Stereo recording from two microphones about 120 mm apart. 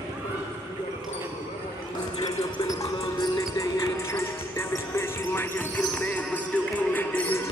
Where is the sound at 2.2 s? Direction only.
30° left (ahead or behind).